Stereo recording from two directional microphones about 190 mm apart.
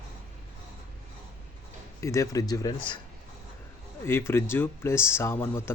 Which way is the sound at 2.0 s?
15° left (ahead or behind).